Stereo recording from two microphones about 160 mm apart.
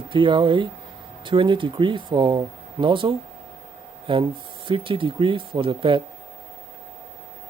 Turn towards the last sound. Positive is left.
turn(degrees=-35)  # may be behind; listen again after turning